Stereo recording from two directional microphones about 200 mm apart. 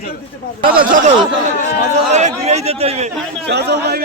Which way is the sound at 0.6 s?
45° right (ahead or behind).